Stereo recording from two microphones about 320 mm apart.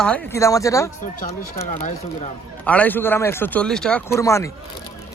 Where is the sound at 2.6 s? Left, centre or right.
Centre.